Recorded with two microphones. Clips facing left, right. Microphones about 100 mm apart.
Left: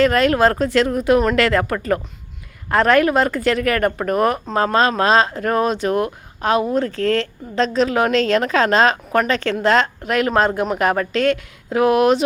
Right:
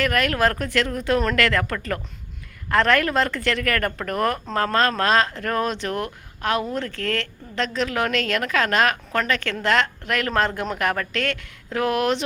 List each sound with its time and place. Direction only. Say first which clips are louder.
0.0 s speech: left 6 dB; 25° left (ahead or behind)